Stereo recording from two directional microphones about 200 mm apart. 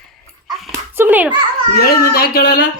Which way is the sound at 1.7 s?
50° left (ahead or behind).